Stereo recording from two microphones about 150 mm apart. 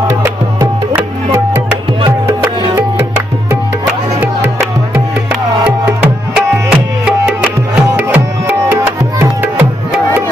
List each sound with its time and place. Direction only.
2.0 s music: 20° right (ahead or behind)
6.3 s music: 5° right (ahead or behind)